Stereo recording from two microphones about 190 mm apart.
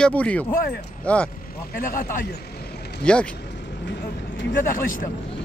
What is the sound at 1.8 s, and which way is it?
Speech, 45° left (ahead or behind).